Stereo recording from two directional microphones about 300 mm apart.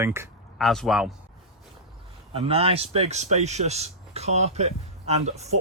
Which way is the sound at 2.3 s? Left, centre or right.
Centre.